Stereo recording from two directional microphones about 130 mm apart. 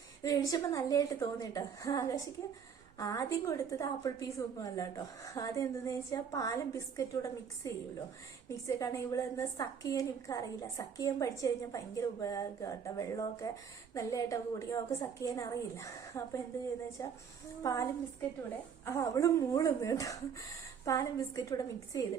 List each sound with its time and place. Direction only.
0.2 s a woman's voice: 25° left (ahead or behind)
18.9 s a woman's voice: 25° left (ahead or behind)